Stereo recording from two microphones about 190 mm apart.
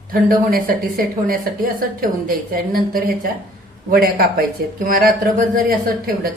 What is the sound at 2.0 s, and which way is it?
A woman's voice, 50° right (ahead or behind).